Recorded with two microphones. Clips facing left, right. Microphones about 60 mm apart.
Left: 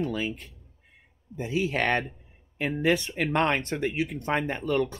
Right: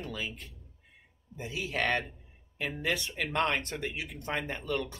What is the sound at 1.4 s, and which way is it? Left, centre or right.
Speech, left.